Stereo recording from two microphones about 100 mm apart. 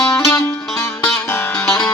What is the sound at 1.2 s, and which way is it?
Music, 25° left (ahead or behind).